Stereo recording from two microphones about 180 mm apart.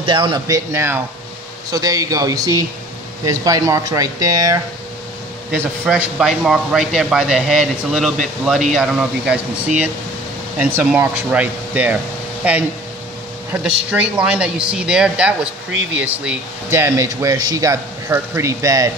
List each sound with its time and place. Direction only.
0.0 s speech: 25° right (ahead or behind)
5.5 s a man's voice: 5° right (ahead or behind)